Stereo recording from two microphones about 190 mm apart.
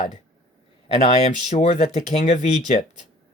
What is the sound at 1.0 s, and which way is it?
Speech, 35° left (ahead or behind).